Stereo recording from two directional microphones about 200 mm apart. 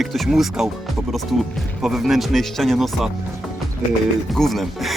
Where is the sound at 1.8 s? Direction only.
Centre (ahead or behind).